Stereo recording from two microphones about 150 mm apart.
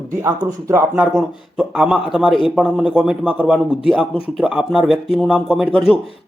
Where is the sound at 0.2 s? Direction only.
20° right (ahead or behind).